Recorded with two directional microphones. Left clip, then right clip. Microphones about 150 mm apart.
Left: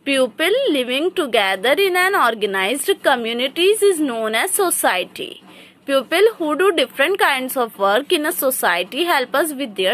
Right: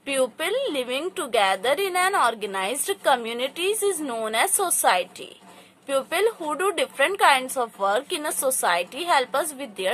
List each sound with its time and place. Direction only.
0.0 s speech: 20° left (ahead or behind)